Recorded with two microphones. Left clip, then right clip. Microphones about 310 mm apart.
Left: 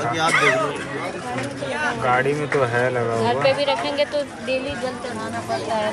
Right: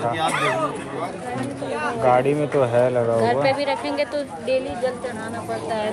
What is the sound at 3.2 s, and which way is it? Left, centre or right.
A woman's voice, right.